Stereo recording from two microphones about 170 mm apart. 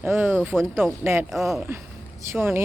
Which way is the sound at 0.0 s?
10° right (ahead or behind).